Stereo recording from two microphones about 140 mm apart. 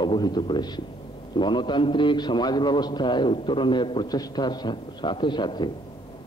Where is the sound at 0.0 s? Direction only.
30° left (ahead or behind).